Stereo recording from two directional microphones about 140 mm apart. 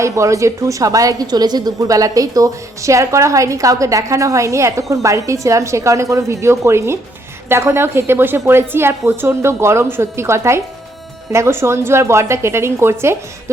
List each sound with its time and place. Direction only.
0.0 s a woman's voice: 20° right (ahead or behind)